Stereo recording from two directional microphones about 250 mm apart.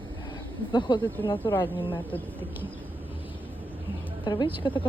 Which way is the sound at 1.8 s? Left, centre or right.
Left.